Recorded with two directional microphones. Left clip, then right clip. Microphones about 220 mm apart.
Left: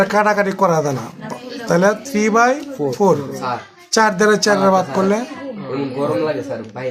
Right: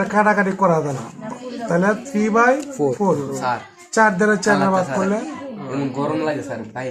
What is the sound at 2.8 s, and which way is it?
Speech, 20° right (ahead or behind).